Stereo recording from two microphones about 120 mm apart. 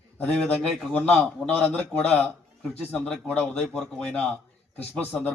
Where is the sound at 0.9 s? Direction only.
15° left (ahead or behind).